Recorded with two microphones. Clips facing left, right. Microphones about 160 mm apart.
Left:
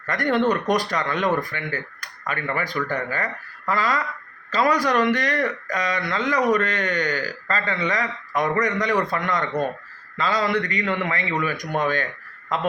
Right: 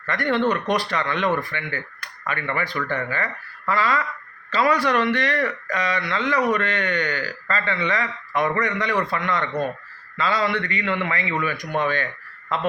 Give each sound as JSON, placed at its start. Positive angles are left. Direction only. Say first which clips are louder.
{"t": 0.0, "sound": "speech", "louder": "left 1 dB", "side_deg": 45}